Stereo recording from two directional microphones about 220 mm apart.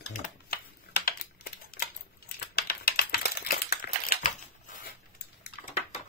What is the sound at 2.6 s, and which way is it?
Typing, 45° left (ahead or behind).